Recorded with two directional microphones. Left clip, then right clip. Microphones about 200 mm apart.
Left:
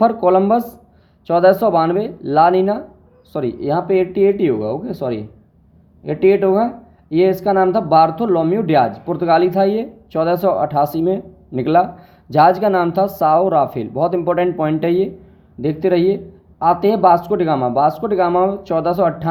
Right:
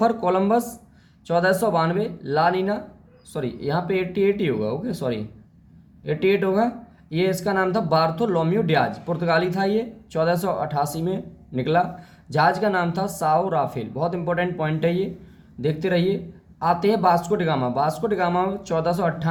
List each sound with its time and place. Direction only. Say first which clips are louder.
0.0 s speech: left 7 dB; 35° left (ahead or behind)